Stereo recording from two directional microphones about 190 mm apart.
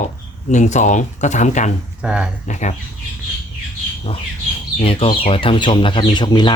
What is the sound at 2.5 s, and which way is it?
Speech, 40° left (ahead or behind).